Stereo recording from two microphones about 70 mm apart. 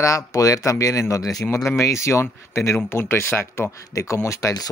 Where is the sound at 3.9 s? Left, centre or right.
Left.